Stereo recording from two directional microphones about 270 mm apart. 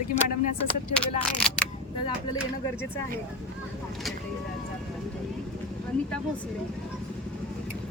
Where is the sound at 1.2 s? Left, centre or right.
Centre.